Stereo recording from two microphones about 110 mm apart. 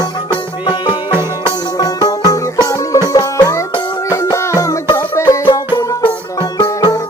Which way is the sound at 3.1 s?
30° left (ahead or behind).